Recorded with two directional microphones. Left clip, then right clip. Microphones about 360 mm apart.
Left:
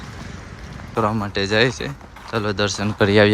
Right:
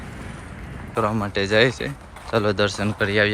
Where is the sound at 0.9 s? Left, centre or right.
Centre.